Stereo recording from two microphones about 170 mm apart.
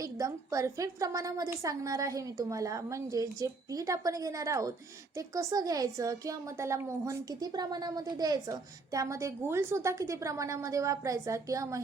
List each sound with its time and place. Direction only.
0.0 s speech: 20° right (ahead or behind)